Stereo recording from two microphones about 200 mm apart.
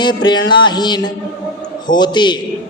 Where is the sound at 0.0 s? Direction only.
20° left (ahead or behind).